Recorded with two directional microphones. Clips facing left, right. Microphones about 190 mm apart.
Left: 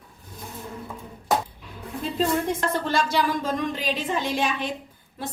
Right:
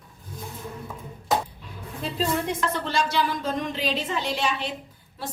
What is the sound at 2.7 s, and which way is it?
Speech, 50° left (ahead or behind).